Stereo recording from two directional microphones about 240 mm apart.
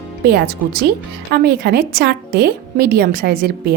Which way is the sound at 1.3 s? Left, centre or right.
Right.